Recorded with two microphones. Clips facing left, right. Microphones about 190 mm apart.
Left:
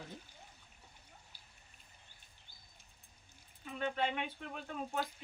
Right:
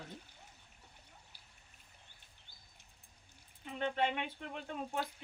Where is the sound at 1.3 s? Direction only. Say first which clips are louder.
Even; 60° right (ahead or behind).